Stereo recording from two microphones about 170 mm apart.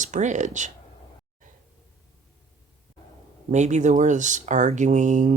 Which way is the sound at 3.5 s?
45° right (ahead or behind).